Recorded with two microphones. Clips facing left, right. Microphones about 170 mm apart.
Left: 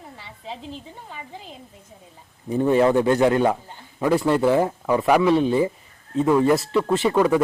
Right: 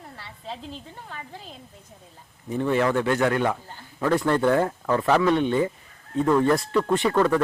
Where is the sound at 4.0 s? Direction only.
10° left (ahead or behind).